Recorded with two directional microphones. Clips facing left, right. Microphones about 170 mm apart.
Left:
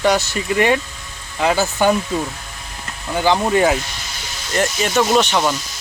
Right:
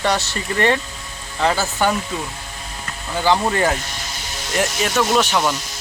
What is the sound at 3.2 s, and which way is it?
Speech, 15° left (ahead or behind).